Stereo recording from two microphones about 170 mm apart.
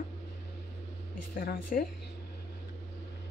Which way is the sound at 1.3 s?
55° left (ahead or behind).